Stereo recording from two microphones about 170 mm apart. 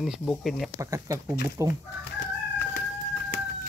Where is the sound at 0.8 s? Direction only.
20° right (ahead or behind).